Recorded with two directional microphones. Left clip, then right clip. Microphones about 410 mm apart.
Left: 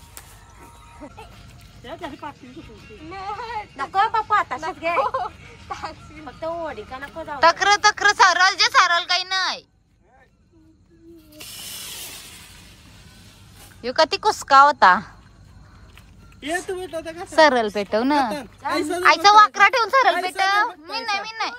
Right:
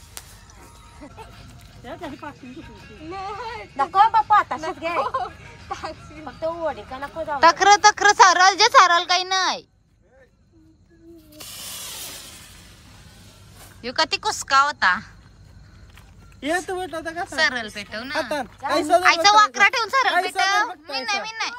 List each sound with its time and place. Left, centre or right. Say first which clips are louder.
1.9 s speech: left 1 dB; centre
11.9 s a sound: even; centre
13.7 s speech: left 3 dB; centre
16.4 s speech: right 2 dB; centre
18.3 s speech: right 2 dB; centre
19.0 s speech: left 5 dB; centre